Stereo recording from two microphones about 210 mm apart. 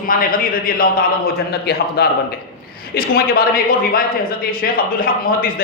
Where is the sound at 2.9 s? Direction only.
45° left (ahead or behind).